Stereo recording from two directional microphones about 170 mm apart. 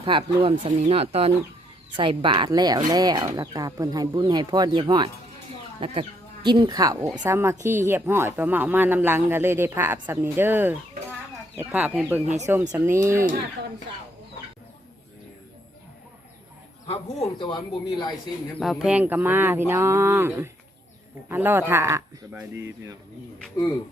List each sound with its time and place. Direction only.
0.0 s speech: 30° right (ahead or behind)
16.8 s a sound: 35° left (ahead or behind)
17.4 s speech: 25° left (ahead or behind)
18.6 s speech: centre (ahead or behind); by 23.0 s 20° right (ahead or behind)